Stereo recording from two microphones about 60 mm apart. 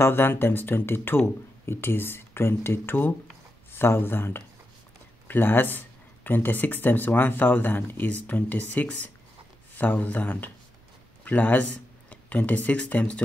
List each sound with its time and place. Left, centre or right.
0.0 s speech: left; by 13.2 s centre